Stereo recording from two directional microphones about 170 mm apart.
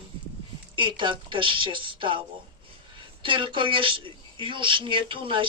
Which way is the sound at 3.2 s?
30° right (ahead or behind).